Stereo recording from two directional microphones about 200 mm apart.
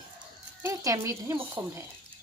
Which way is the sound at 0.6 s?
15° right (ahead or behind).